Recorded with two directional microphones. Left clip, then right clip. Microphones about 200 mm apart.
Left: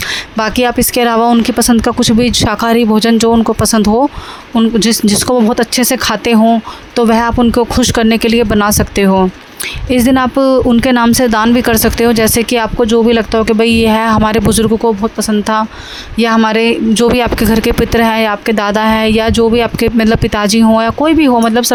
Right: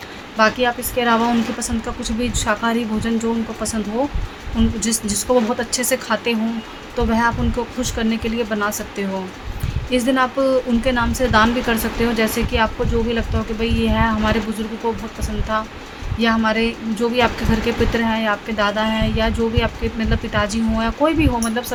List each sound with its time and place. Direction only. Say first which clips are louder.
0.3 s speech: left 4 dB; 55° left (ahead or behind)